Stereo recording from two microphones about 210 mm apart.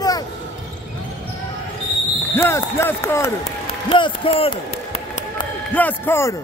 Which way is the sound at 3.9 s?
25° left (ahead or behind).